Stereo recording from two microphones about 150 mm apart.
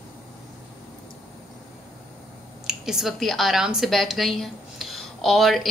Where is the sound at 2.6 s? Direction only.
Centre (ahead or behind).